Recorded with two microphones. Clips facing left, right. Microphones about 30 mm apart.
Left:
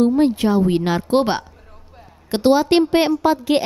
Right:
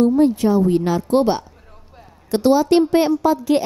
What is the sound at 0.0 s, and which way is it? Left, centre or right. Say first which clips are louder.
A woman's voice: right 1 dB; left.